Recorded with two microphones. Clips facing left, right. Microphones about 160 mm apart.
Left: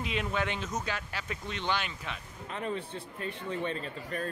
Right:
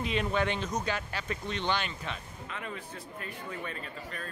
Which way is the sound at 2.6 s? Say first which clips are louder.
Left 7 dB; 30° left (ahead or behind).